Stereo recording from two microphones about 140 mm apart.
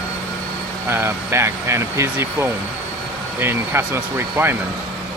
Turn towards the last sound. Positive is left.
turn(degrees=-15)  # may be behind; listen again after turning